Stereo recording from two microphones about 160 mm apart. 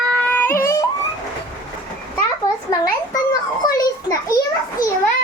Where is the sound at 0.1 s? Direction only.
10° left (ahead or behind).